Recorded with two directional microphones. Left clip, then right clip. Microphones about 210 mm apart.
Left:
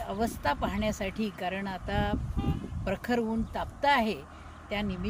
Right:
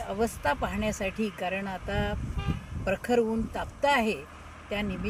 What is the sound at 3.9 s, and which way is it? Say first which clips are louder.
Speech: even; centre (ahead or behind).